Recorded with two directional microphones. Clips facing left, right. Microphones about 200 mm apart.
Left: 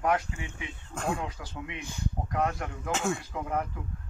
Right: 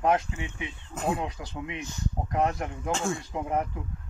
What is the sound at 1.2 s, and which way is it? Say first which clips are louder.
Speech: right 3 dB; 20° right (ahead or behind).